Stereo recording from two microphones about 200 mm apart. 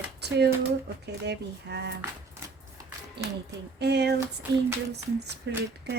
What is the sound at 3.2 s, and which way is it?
Speech, 55° right (ahead or behind).